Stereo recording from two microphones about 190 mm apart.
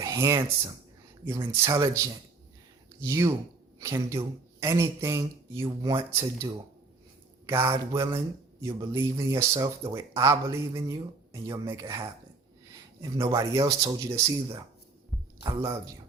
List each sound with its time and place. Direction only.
0.0 s speech: 15° right (ahead or behind)